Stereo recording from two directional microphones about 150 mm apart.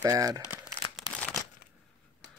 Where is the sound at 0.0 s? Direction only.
25° right (ahead or behind).